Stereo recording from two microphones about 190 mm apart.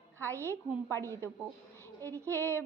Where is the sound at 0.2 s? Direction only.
15° right (ahead or behind).